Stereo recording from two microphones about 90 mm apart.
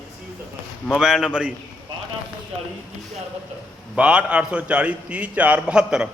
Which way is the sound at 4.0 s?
10° right (ahead or behind).